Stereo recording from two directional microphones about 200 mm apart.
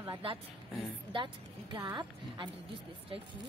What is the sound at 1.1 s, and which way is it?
A woman's voice, 25° right (ahead or behind).